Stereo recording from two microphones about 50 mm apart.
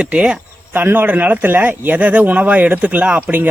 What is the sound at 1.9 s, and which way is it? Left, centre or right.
Speech, right.